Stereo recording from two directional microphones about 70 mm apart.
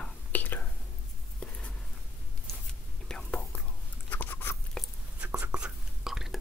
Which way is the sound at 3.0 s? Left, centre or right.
Centre.